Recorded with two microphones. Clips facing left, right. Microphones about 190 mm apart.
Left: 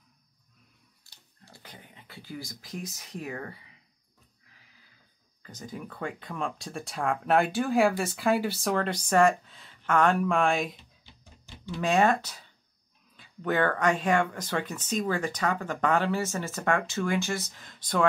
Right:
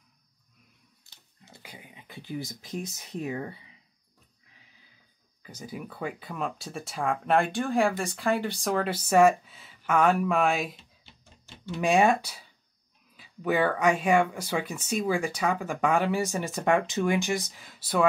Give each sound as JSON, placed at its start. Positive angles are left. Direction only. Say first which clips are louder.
{"t": 1.0, "sound": "a sound", "louder": "even", "side_deg": -20}
{"t": 1.6, "sound": "speech", "louder": "right 2 dB", "side_deg": -10}
{"t": 5.4, "sound": "speech", "louder": "right 1 dB", "side_deg": -10}